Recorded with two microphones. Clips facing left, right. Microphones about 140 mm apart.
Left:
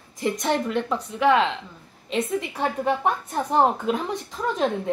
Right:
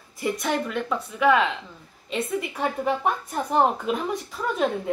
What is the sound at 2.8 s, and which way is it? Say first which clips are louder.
A woman's voice: left 2 dB; 20° left (ahead or behind).